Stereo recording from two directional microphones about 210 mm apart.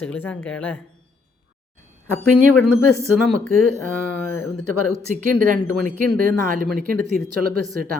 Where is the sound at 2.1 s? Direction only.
90° left.